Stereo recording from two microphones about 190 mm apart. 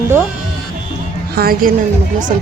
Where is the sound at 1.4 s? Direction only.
50° right (ahead or behind).